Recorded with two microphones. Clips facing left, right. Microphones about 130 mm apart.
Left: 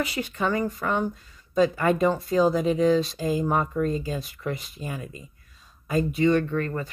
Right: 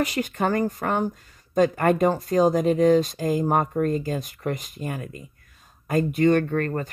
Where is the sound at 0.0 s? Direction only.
45° right (ahead or behind).